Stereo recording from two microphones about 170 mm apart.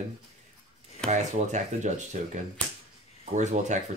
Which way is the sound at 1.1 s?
45° right (ahead or behind).